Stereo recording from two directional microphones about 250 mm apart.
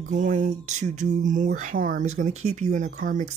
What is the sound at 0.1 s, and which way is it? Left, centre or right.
Speech, right.